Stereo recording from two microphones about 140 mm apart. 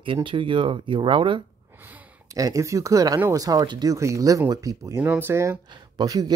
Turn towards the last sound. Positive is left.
turn(degrees=-25)  # may be behind; listen again after turning